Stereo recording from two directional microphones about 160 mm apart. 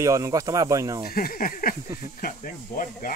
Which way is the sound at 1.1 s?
65° left (ahead or behind).